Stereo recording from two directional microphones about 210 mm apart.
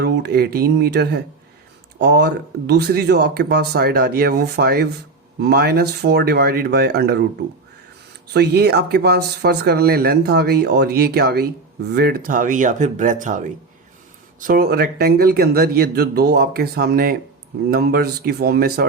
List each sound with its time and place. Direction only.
0.0 s speech: 50° right (ahead or behind)
8.3 s speech: 50° right (ahead or behind)